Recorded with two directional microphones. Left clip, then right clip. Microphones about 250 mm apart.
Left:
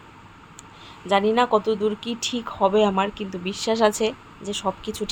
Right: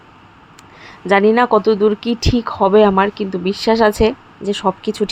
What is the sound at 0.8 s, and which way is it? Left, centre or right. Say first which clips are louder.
Speech: right 8 dB; right.